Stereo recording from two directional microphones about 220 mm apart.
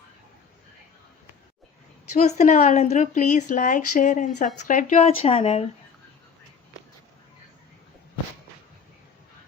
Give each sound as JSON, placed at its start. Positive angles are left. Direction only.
{"t": 2.1, "sound": "speech", "side_deg": 35}